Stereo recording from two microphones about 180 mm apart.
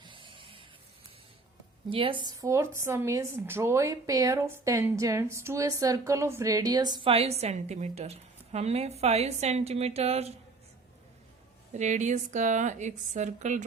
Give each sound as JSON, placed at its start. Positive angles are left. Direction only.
{"t": 0.0, "sound": "a sound", "side_deg": -25}
{"t": 1.9, "sound": "a woman's voice", "side_deg": -30}
{"t": 11.7, "sound": "a woman's voice", "side_deg": -40}